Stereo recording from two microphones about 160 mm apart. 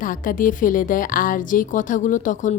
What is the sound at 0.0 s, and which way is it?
A woman's voice, 60° left (ahead or behind).